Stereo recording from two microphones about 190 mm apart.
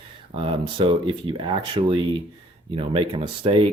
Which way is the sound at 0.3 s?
30° right (ahead or behind).